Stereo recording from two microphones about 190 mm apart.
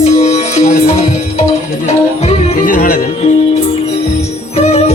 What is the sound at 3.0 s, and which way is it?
Music, 35° left (ahead or behind).